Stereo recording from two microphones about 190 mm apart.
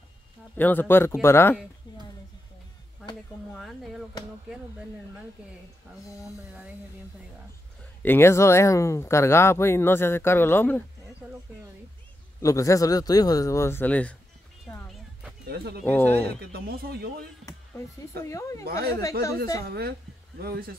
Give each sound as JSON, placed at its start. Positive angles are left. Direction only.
{"t": 0.6, "sound": "speech", "side_deg": 10}
{"t": 3.5, "sound": "speech", "side_deg": 0}
{"t": 8.0, "sound": "speech", "side_deg": 10}
{"t": 11.2, "sound": "a sound", "side_deg": -5}
{"t": 12.4, "sound": "speech", "side_deg": 15}
{"t": 15.4, "sound": "speech", "side_deg": -55}
{"t": 15.8, "sound": "speech", "side_deg": 10}
{"t": 16.3, "sound": "speech", "side_deg": -55}
{"t": 17.5, "sound": "speech", "side_deg": 15}
{"t": 19.6, "sound": "speech", "side_deg": -55}